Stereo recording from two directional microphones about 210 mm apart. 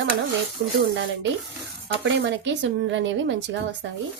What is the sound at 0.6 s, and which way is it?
Speech, 40° right (ahead or behind).